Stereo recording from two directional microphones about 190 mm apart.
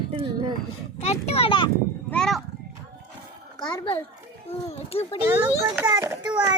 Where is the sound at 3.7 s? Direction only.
30° left (ahead or behind).